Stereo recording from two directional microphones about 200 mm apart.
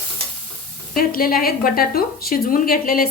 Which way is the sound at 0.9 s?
45° left (ahead or behind).